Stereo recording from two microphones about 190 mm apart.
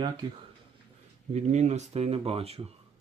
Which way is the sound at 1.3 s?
35° right (ahead or behind).